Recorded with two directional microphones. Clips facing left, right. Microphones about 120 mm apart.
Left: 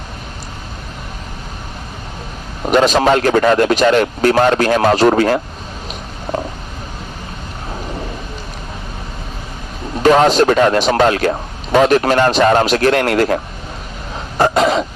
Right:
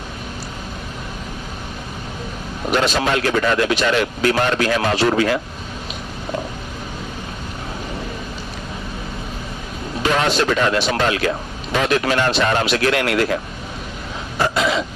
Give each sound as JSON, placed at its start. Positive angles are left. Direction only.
{"t": 2.7, "sound": "speech", "side_deg": 45}
{"t": 10.0, "sound": "speech", "side_deg": 45}
{"t": 14.3, "sound": "cough", "side_deg": 45}